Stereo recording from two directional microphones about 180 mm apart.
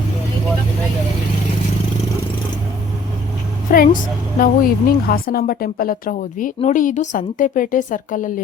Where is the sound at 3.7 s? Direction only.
55° left (ahead or behind).